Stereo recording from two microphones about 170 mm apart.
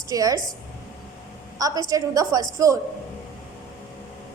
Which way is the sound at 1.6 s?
20° right (ahead or behind).